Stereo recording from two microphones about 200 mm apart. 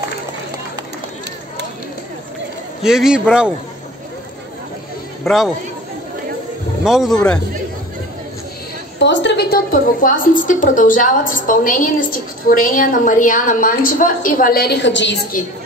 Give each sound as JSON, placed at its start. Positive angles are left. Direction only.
{"t": 2.8, "sound": "a man's voice", "side_deg": -5}
{"t": 5.2, "sound": "speech", "side_deg": 0}
{"t": 6.8, "sound": "speech", "side_deg": 0}
{"t": 9.0, "sound": "a woman's voice", "side_deg": 60}
{"t": 15.3, "sound": "a woman's voice", "side_deg": 45}